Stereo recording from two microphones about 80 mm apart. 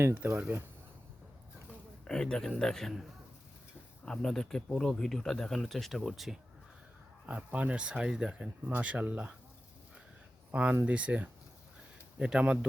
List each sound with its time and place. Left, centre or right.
0.1 s speech: right
2.0 s speech: centre
7.3 s speech: centre
10.5 s speech: centre